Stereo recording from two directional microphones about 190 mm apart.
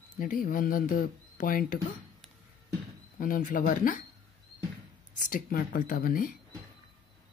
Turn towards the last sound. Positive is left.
turn(degrees=45)  # may be behind; listen again after turning